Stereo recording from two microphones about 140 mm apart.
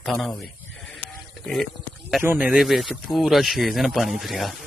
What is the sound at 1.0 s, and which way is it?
Radio, centre (ahead or behind).